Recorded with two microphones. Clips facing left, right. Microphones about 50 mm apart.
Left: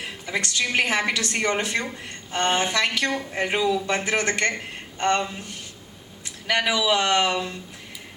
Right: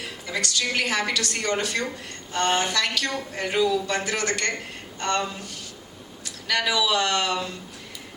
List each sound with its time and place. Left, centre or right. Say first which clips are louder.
0.3 s speech: left 1 dB; left